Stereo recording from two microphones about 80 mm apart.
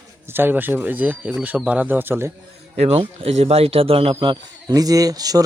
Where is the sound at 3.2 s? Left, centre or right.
Right.